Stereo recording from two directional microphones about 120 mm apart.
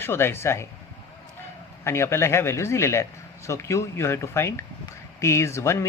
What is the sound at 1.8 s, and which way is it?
Speech, 20° left (ahead or behind).